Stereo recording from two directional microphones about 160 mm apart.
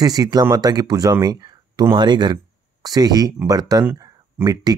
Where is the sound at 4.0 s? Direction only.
20° right (ahead or behind).